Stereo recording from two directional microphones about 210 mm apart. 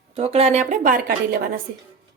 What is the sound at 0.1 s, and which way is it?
A woman's voice, 30° right (ahead or behind).